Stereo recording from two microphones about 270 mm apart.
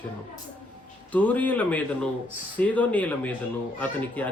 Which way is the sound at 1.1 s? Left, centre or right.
Centre.